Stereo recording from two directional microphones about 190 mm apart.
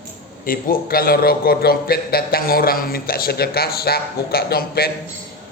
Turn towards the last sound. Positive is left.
turn(degrees=55)  # may be behind; listen again after turning